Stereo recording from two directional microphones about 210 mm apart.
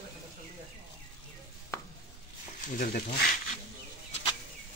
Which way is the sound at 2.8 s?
40° left (ahead or behind).